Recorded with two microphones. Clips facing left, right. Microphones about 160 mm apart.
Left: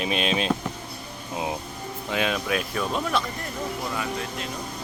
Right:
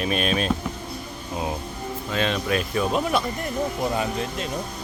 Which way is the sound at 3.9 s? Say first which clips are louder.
Right 4 dB; 25° right (ahead or behind).